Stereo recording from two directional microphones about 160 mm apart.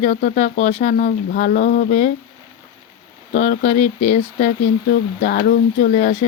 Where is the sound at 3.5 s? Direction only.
50° left (ahead or behind).